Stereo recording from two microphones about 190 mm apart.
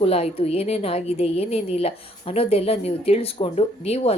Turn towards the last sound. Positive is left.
turn(degrees=30)  # may be behind; listen again after turning